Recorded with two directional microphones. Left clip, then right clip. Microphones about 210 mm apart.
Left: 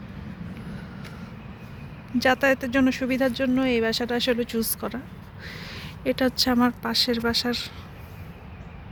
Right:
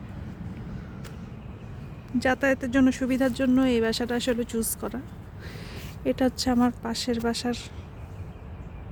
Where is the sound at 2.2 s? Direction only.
10° right (ahead or behind).